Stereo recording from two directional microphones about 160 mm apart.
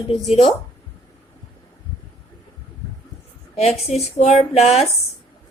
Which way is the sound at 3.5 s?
40° left (ahead or behind).